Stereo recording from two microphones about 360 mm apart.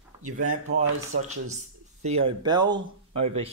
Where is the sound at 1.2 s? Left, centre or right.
Centre.